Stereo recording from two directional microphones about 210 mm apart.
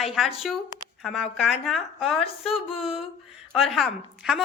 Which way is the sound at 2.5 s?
25° left (ahead or behind).